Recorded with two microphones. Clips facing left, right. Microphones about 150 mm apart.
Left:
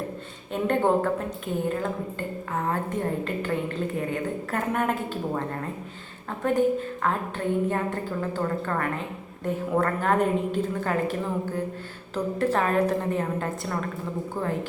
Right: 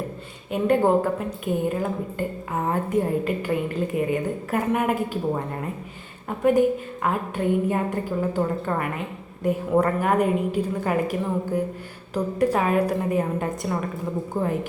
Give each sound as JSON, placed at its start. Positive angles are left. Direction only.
{"t": 0.5, "sound": "a woman's voice", "side_deg": -5}
{"t": 6.4, "sound": "a woman's voice", "side_deg": -10}